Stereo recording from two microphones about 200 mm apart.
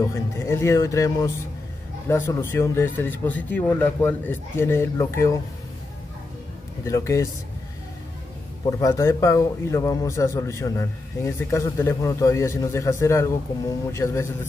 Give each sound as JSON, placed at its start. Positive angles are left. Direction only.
{"t": 0.0, "sound": "a man's voice", "side_deg": 15}
{"t": 6.8, "sound": "a man's voice", "side_deg": 15}
{"t": 8.6, "sound": "a man's voice", "side_deg": 15}